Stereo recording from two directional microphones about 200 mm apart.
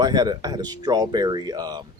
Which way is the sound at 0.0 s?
20° right (ahead or behind).